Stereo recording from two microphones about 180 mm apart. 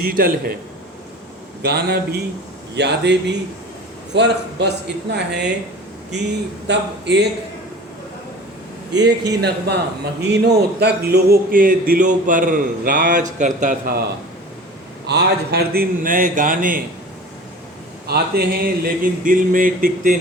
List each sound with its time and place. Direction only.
0.1 s speech: 55° right (ahead or behind)
1.6 s a man's voice: 65° right (ahead or behind)
6.7 s a man's voice: 70° right (ahead or behind)
8.9 s a man's voice: 70° right (ahead or behind); by 14.0 s 50° right (ahead or behind)
15.0 s speech: 65° right (ahead or behind); by 16.8 s 50° right (ahead or behind)
18.0 s speech: 60° right (ahead or behind)